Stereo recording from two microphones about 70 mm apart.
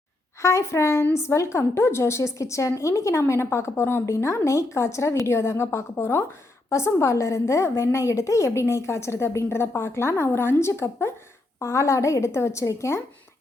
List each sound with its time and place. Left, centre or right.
0.4 s a woman's voice: left
4.0 s a woman's voice: left